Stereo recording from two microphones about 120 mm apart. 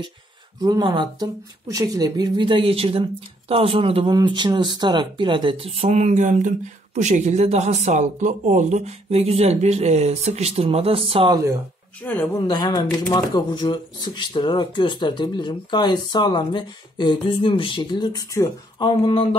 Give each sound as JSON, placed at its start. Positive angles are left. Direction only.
{"t": 0.6, "sound": "a woman's voice", "side_deg": -35}
{"t": 4.3, "sound": "speech", "side_deg": -40}
{"t": 12.0, "sound": "a woman's voice", "side_deg": 15}
{"t": 12.4, "sound": "speech", "side_deg": 30}
{"t": 18.8, "sound": "speech", "side_deg": 50}